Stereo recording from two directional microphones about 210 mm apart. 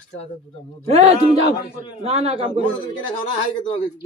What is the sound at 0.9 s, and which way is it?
A man's voice, 30° right (ahead or behind).